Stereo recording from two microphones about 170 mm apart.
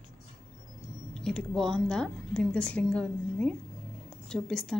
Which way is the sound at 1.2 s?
5° left (ahead or behind).